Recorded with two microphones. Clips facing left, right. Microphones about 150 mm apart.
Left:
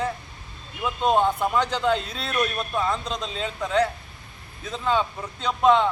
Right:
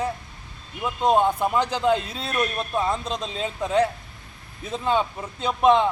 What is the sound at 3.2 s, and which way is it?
Speech, 25° right (ahead or behind).